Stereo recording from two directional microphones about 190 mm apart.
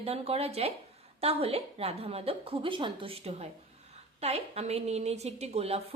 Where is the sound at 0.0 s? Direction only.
30° right (ahead or behind).